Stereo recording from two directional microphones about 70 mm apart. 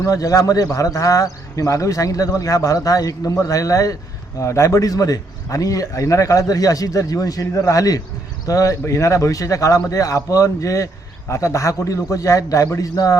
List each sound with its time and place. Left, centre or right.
0.0 s a man's voice: left